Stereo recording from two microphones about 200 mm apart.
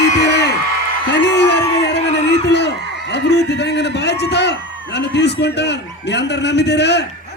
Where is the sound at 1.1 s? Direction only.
60° left (ahead or behind).